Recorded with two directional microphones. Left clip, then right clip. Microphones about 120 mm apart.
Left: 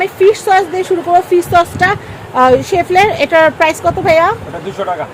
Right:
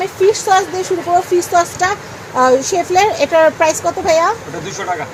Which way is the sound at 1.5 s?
30° left (ahead or behind).